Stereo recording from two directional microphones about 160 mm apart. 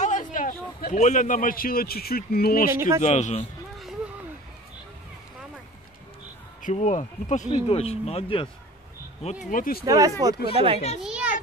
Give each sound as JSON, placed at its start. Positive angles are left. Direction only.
{"t": 0.0, "sound": "a sound", "side_deg": 50}
{"t": 0.9, "sound": "speech", "side_deg": 50}
{"t": 2.7, "sound": "speech", "side_deg": -15}
{"t": 3.0, "sound": "speech", "side_deg": 45}
{"t": 6.6, "sound": "speech", "side_deg": 50}
{"t": 9.5, "sound": "speech", "side_deg": 65}
{"t": 9.8, "sound": "speech", "side_deg": -20}
{"t": 10.5, "sound": "speech", "side_deg": -35}
{"t": 11.0, "sound": "a sound", "side_deg": -5}